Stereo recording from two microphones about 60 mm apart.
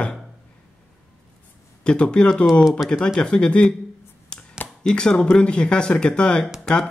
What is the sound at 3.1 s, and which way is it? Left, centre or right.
Speech, centre.